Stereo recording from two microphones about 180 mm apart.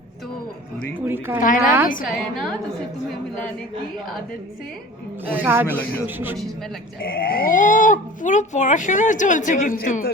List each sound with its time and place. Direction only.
0.9 s speech: 10° right (ahead or behind)
1.4 s speech: 50° left (ahead or behind)
2.3 s a woman's voice: centre (ahead or behind)
5.4 s speech: 10° right (ahead or behind)
5.6 s speech: 10° left (ahead or behind)
6.1 s speech: 10° right (ahead or behind)
7.0 s speech: 55° left (ahead or behind)